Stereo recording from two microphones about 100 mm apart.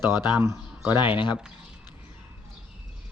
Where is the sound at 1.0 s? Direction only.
55° left (ahead or behind).